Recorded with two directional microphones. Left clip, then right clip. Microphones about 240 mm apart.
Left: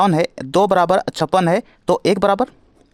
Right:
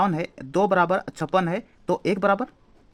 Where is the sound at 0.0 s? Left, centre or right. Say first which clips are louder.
Left 8 dB; left.